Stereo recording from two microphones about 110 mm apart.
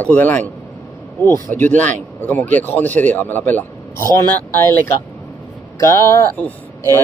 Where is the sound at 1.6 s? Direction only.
15° left (ahead or behind).